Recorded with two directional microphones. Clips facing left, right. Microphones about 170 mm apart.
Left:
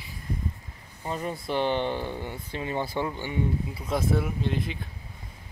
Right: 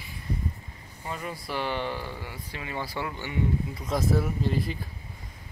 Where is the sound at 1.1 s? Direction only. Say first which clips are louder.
Left 4 dB; 30° left (ahead or behind); by 3.3 s 15° left (ahead or behind).